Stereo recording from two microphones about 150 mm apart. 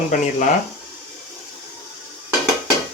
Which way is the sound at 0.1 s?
55° left (ahead or behind).